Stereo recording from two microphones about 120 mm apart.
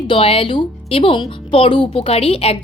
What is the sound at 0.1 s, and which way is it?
A woman's voice, 50° left (ahead or behind).